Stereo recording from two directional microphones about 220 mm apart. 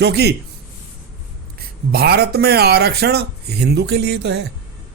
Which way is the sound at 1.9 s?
45° right (ahead or behind).